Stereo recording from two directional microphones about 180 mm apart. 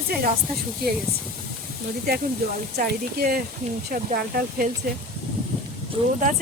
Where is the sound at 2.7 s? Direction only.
60° right (ahead or behind).